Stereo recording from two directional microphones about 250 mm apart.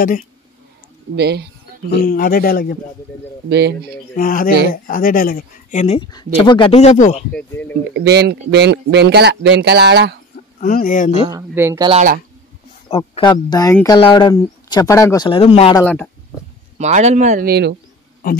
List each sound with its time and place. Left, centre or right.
1.1 s speech: right
2.0 s speech: left
3.4 s speech: right
4.2 s speech: left
7.3 s speech: centre
7.9 s speech: right
10.6 s speech: left
11.2 s speech: centre
11.9 s speech: right
12.9 s speech: left
15.8 s speech: centre
16.7 s speech: right